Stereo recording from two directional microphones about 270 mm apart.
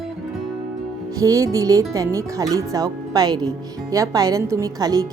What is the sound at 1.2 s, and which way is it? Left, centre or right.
Speech, centre.